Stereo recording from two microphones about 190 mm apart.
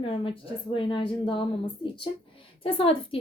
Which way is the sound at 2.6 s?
30° left (ahead or behind).